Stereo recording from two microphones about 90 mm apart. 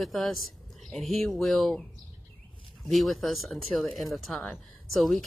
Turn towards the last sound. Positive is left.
turn(degrees=0)  # may be behind; listen again after turning